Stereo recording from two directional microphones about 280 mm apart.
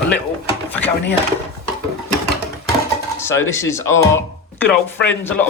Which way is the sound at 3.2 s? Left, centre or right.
Centre.